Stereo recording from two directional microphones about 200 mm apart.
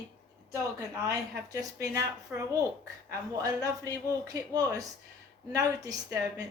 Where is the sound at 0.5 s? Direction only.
15° right (ahead or behind).